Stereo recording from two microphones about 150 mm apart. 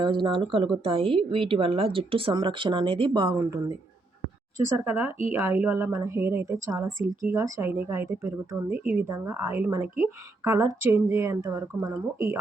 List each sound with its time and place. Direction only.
0.0 s a woman's voice: 30° right (ahead or behind)
4.9 s a woman's voice: 15° right (ahead or behind)